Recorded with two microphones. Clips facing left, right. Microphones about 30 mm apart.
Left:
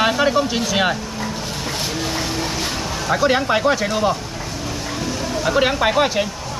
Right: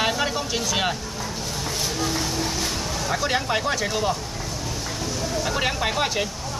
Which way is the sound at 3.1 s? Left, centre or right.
Centre.